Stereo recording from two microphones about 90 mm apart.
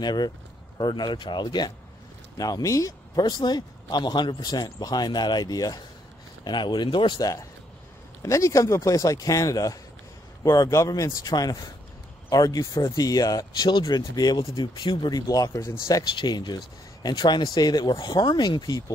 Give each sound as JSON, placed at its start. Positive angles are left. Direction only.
{"t": 0.0, "sound": "speech", "side_deg": 55}
{"t": 2.3, "sound": "speech", "side_deg": 45}
{"t": 6.4, "sound": "speech", "side_deg": 55}
{"t": 7.2, "sound": "speech", "side_deg": 45}
{"t": 13.7, "sound": "speech", "side_deg": 55}
{"t": 15.9, "sound": "speech", "side_deg": 50}